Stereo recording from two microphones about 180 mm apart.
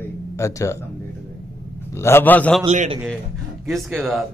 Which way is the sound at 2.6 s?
35° right (ahead or behind).